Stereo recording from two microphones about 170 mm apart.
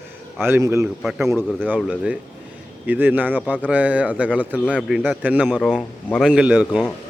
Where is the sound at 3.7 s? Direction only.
10° right (ahead or behind).